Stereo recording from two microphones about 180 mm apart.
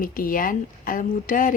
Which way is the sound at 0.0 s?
50° left (ahead or behind).